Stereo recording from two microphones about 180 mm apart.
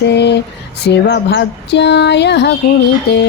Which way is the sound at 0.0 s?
70° left (ahead or behind).